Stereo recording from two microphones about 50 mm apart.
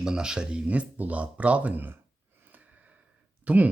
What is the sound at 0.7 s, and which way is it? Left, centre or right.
Speech, right.